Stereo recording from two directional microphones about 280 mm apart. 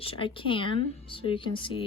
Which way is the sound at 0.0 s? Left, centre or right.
Centre.